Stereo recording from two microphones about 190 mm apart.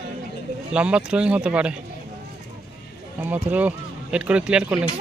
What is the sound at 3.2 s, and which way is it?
Speech, 10° right (ahead or behind).